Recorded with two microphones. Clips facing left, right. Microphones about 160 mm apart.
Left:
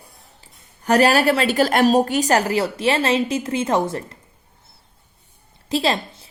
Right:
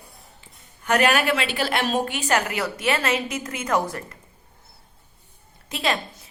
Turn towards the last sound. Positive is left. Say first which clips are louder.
# left 5 dB
turn(degrees=30)  # may be behind; listen again after turning